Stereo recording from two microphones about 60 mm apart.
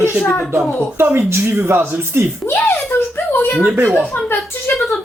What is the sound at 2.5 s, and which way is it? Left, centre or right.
Speech, left.